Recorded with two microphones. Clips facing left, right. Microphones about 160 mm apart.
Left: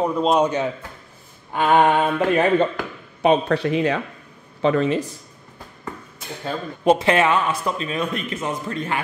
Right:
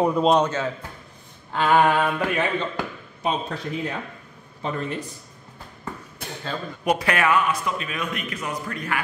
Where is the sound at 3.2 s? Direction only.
70° left (ahead or behind); by 5.0 s 90° left.